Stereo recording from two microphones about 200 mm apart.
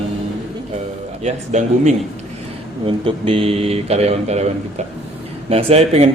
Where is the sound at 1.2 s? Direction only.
35° right (ahead or behind).